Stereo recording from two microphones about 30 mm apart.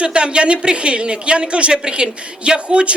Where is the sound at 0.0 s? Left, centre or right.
Right.